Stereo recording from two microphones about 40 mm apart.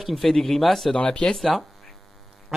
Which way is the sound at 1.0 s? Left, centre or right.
Left.